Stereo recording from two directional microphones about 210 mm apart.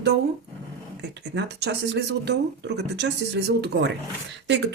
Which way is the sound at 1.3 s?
55° right (ahead or behind).